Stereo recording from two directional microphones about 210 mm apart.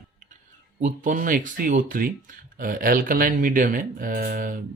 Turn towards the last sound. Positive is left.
turn(degrees=-40)  # may be behind; listen again after turning